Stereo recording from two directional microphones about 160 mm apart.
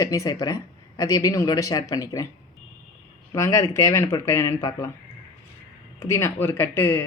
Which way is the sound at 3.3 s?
20° left (ahead or behind).